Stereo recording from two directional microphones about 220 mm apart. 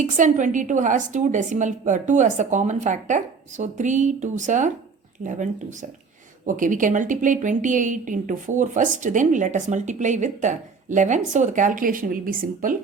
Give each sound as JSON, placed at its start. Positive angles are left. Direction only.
{"t": 0.0, "sound": "a woman's voice", "side_deg": -35}